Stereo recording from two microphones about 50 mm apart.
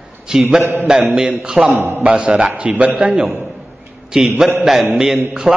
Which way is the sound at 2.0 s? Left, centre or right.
Right.